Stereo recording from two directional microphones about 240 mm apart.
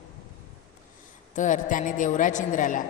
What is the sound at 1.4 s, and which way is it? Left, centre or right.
A woman's voice, left.